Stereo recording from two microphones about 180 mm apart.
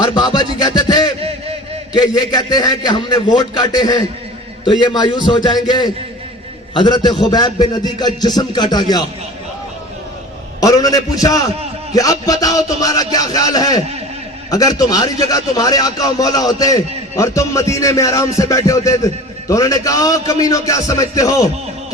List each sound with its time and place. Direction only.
0.0 s music: 25° left (ahead or behind)
2.0 s a man's voice: 20° left (ahead or behind)
10.6 s a man's voice: 20° left (ahead or behind)